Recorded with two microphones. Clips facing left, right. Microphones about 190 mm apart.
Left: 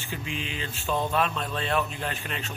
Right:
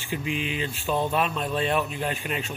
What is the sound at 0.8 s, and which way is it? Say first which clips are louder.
Speech: right 1 dB; 10° right (ahead or behind).